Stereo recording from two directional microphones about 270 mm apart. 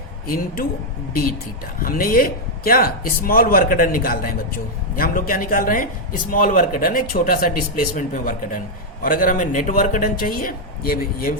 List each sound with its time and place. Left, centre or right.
1.8 s speech: left